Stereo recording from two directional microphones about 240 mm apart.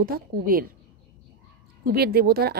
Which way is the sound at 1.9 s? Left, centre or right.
Right.